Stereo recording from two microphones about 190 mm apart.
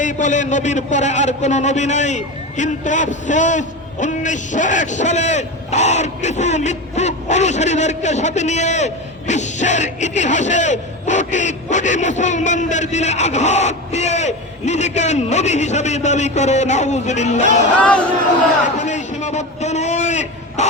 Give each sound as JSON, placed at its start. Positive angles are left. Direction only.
{"t": 0.0, "sound": "a man's voice", "side_deg": 40}
{"t": 18.8, "sound": "a man's voice", "side_deg": 40}